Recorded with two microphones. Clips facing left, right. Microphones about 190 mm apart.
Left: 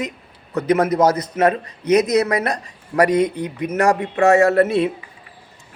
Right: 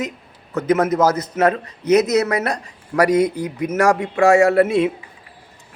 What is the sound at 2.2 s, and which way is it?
Speech, 35° left (ahead or behind).